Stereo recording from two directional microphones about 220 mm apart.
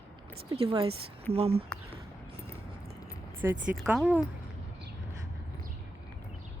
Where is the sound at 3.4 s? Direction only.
5° right (ahead or behind).